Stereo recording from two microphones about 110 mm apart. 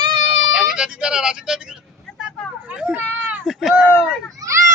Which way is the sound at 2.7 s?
10° right (ahead or behind).